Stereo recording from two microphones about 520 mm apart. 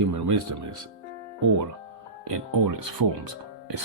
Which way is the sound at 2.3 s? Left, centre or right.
Right.